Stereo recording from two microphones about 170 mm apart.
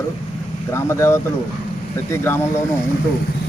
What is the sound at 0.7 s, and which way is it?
Speech, 15° left (ahead or behind).